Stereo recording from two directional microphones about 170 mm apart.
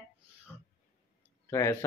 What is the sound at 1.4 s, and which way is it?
Speech, 15° left (ahead or behind).